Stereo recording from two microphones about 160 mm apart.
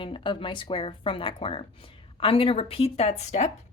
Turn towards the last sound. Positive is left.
turn(degrees=45)  # may be behind; listen again after turning